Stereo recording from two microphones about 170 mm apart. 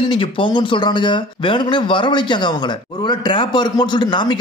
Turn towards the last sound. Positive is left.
turn(degrees=25)  # may be behind; listen again after turning